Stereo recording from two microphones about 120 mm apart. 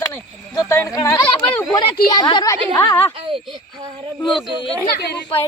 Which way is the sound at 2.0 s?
35° left (ahead or behind).